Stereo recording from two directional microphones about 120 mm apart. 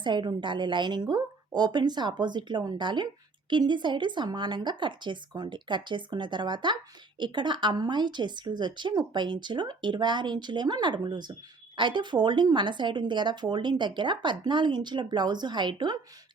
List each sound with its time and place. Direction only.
0.0 s speech: 40° right (ahead or behind)